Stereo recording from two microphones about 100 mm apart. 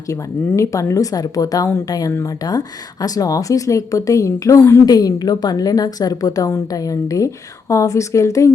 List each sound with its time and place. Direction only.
0.1 s speech: 30° left (ahead or behind)